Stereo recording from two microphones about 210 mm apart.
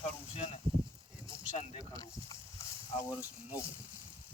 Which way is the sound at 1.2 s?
25° right (ahead or behind).